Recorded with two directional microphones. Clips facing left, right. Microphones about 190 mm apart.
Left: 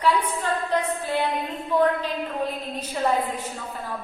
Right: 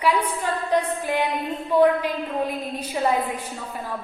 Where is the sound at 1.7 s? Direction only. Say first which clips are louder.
Right 4 dB; 10° right (ahead or behind).